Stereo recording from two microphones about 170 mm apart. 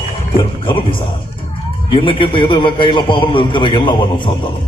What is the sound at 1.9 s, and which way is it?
A man's voice, 30° left (ahead or behind).